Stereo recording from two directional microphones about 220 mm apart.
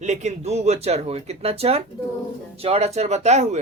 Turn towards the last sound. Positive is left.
turn(degrees=-30)  # may be behind; listen again after turning